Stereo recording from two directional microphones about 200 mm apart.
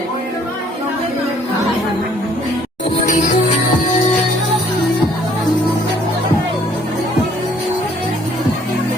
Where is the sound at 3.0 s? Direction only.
40° left (ahead or behind).